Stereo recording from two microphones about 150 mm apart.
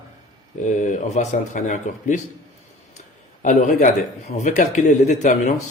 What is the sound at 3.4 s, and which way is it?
Speech, 55° left (ahead or behind).